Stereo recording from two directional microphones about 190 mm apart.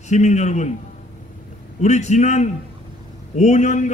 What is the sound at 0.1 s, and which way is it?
Speech, 40° left (ahead or behind).